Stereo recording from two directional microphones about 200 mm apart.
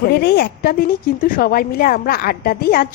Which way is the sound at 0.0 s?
50° left (ahead or behind).